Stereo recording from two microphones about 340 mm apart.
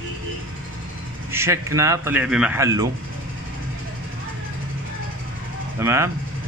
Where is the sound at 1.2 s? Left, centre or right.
Centre.